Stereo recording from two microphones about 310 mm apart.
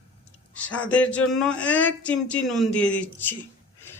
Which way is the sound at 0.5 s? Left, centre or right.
Centre.